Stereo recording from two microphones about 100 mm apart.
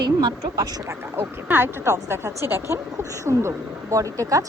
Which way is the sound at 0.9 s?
20° right (ahead or behind).